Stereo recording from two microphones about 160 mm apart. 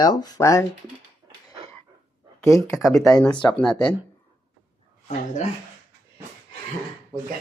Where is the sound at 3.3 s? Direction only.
25° left (ahead or behind).